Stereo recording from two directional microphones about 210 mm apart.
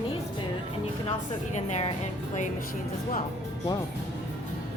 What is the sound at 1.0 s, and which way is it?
Speech, 35° left (ahead or behind).